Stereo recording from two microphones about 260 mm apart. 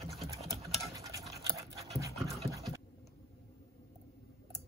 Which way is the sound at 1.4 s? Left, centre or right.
Centre.